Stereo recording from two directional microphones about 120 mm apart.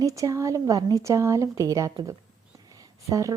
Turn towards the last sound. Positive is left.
turn(degrees=-25)  # may be behind; listen again after turning